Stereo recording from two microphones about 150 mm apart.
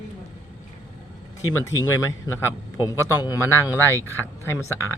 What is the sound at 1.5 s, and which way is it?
Speech, 20° left (ahead or behind).